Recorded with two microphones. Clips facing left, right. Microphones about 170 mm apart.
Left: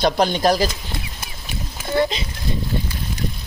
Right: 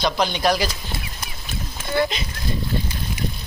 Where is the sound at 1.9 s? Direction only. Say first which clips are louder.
Left 2 dB; 30° left (ahead or behind).